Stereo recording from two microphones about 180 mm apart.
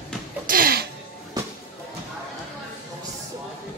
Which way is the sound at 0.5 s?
55° right (ahead or behind).